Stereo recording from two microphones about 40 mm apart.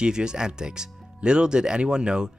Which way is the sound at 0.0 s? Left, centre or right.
Centre.